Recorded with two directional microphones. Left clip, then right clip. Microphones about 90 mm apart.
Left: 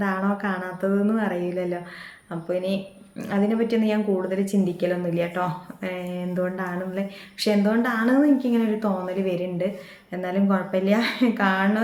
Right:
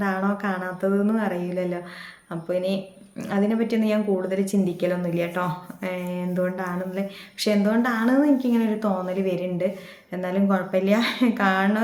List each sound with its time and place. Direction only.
0.0 s speech: 15° right (ahead or behind)